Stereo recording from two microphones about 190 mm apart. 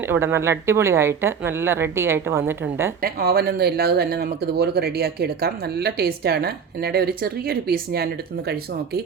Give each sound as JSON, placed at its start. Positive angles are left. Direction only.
{"t": 0.1, "sound": "speech", "side_deg": -15}
{"t": 3.0, "sound": "speech", "side_deg": -55}